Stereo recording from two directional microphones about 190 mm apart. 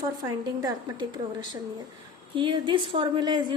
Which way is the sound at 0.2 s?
20° right (ahead or behind).